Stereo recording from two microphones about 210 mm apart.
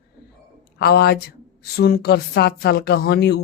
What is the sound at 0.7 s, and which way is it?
A woman's voice, 50° left (ahead or behind).